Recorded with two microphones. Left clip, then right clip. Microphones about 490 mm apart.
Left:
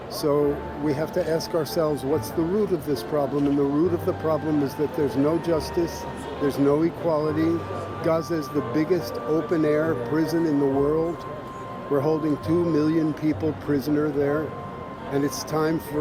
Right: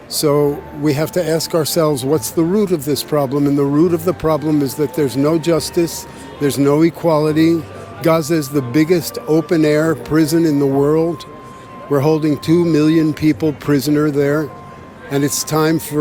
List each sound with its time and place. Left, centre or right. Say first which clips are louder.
0.2 s speech: right 8 dB; right
11.9 s speech: right 8 dB; right